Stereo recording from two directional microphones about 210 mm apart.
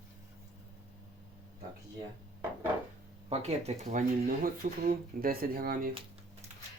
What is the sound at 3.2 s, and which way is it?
Speech, 30° right (ahead or behind).